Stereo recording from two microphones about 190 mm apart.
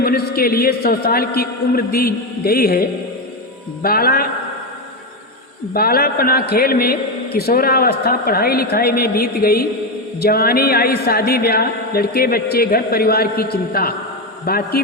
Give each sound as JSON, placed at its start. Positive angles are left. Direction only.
{"t": 0.0, "sound": "a man's voice", "side_deg": 50}
{"t": 3.8, "sound": "a man's voice", "side_deg": 50}
{"t": 5.7, "sound": "a man's voice", "side_deg": 50}